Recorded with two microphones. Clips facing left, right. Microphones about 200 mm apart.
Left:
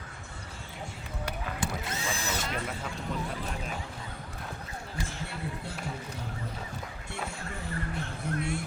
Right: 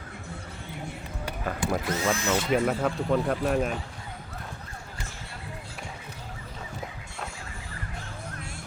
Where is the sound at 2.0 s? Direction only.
60° right (ahead or behind).